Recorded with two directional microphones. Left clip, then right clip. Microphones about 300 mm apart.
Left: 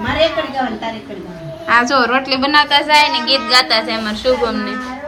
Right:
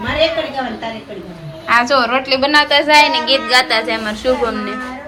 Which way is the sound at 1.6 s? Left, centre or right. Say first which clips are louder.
Even; centre.